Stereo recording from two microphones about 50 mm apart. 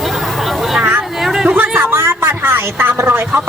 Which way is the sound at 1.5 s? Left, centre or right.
Right.